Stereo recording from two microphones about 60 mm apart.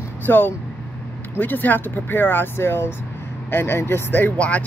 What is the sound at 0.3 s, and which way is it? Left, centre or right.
Speech, left.